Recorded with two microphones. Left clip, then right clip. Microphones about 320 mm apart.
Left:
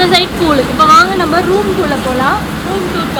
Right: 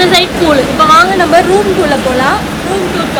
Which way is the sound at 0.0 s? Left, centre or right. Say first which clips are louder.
Right 2 dB; left.